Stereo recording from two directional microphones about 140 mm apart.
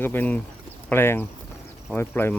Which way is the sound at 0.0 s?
15° left (ahead or behind).